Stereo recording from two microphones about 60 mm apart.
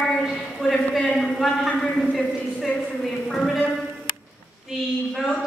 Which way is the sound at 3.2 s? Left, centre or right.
Centre.